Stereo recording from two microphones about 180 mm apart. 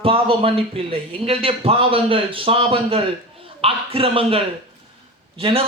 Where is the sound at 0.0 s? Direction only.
30° right (ahead or behind).